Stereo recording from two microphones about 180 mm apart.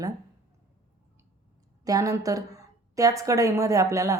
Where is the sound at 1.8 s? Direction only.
20° right (ahead or behind).